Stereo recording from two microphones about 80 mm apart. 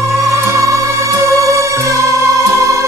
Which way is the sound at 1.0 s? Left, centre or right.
Right.